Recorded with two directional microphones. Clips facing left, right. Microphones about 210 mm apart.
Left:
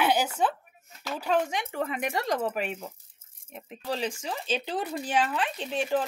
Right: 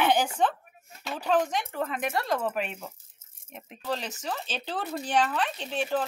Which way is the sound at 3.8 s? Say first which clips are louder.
Left 1 dB; 10° left (ahead or behind).